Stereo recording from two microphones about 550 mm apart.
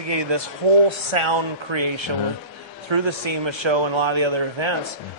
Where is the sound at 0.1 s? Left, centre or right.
Right.